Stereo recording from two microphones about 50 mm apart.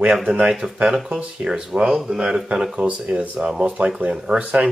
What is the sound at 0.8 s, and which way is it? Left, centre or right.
Speech, centre.